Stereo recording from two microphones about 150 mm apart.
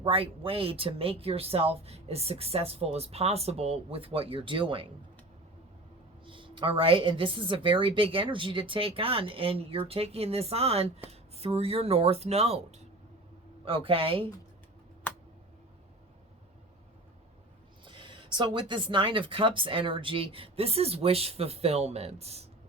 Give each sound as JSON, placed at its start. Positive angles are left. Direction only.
{"t": 0.0, "sound": "speech", "side_deg": -40}
{"t": 6.2, "sound": "speech", "side_deg": -35}
{"t": 17.8, "sound": "speech", "side_deg": -35}